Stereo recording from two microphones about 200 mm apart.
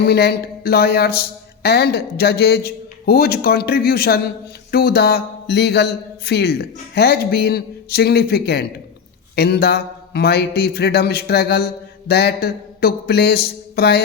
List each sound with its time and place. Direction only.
0.0 s speech: 50° left (ahead or behind)